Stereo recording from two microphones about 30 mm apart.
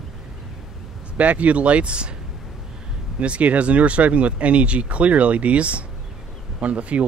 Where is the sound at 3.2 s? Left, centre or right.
Right.